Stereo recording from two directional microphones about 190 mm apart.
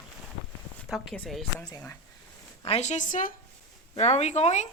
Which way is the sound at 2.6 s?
35° left (ahead or behind).